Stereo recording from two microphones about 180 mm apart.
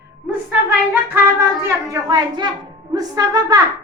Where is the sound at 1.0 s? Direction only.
15° right (ahead or behind).